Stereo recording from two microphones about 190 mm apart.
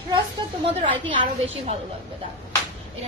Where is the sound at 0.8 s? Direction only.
30° right (ahead or behind).